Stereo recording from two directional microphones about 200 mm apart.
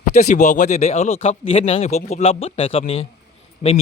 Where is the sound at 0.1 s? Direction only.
35° left (ahead or behind).